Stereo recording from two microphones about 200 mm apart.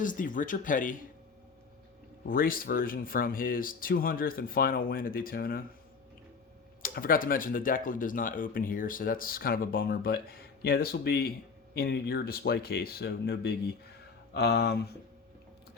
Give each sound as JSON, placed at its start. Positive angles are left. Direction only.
{"t": 0.0, "sound": "speech", "side_deg": 40}
{"t": 2.2, "sound": "speech", "side_deg": 45}
{"t": 6.8, "sound": "speech", "side_deg": 45}